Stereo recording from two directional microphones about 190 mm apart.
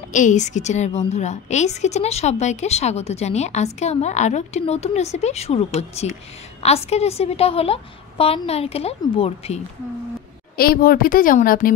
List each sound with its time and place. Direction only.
0.1 s a woman's voice: 40° left (ahead or behind)
10.5 s a woman's voice: 50° left (ahead or behind)